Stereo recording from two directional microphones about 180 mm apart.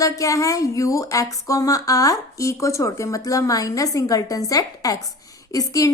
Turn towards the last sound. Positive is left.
turn(degrees=20)  # may be behind; listen again after turning